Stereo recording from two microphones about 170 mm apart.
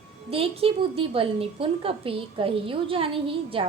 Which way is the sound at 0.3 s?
35° right (ahead or behind).